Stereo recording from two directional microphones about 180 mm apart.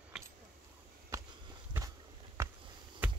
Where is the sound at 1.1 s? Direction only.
15° right (ahead or behind).